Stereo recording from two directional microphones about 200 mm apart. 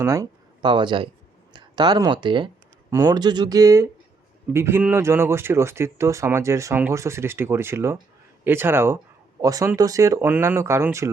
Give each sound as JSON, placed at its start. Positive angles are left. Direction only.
{"t": 0.0, "sound": "speech", "side_deg": -15}